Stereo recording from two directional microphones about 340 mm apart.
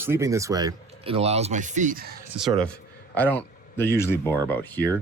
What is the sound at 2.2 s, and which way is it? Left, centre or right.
Speech, centre.